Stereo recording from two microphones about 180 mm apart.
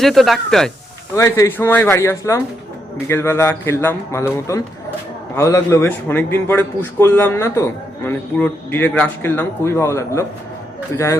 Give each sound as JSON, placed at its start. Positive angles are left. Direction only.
{"t": 0.0, "sound": "speech", "side_deg": 0}
{"t": 1.1, "sound": "a man's voice", "side_deg": 15}
{"t": 5.3, "sound": "a man's voice", "side_deg": 15}